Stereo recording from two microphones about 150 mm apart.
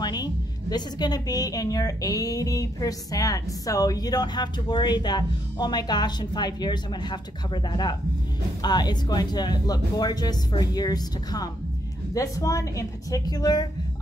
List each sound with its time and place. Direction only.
0.0 s a woman's voice: 25° left (ahead or behind)